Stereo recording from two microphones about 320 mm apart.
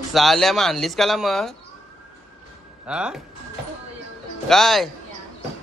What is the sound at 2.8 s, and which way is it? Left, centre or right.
Speech, centre.